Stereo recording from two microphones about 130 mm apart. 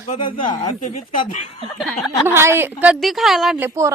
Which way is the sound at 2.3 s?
20° right (ahead or behind).